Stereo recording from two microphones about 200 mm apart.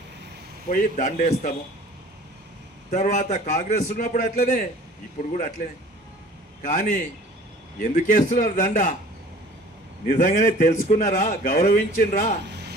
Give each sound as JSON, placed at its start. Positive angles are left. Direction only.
{"t": 0.7, "sound": "a man's voice", "side_deg": 40}
{"t": 2.9, "sound": "a man's voice", "side_deg": 35}
{"t": 6.6, "sound": "a man's voice", "side_deg": 40}
{"t": 10.1, "sound": "a man's voice", "side_deg": 40}
{"t": 12.4, "sound": "a sound", "side_deg": -55}